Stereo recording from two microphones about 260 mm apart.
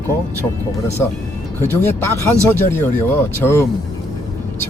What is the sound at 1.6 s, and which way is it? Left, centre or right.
Speech, centre.